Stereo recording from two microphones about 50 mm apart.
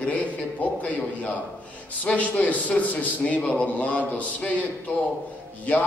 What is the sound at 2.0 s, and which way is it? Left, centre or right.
A man's voice, left.